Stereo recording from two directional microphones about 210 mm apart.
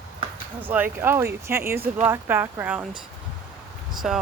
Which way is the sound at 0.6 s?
10° right (ahead or behind).